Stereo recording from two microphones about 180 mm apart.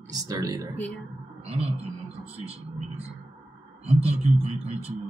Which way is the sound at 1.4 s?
35° right (ahead or behind).